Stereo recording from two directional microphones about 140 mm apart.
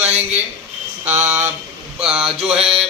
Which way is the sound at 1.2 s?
10° right (ahead or behind).